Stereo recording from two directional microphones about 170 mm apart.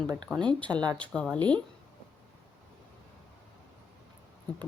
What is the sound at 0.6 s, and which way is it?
Speech, 25° right (ahead or behind).